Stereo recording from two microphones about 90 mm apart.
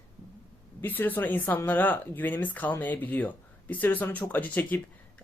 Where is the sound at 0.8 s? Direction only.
20° left (ahead or behind).